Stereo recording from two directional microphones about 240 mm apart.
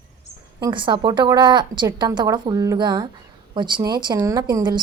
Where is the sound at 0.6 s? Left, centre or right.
Centre.